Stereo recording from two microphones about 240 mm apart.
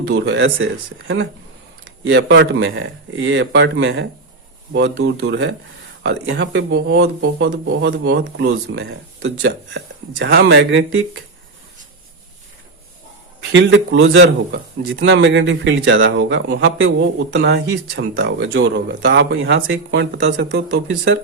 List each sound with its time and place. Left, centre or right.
0.1 s a man's voice: right
13.5 s a man's voice: right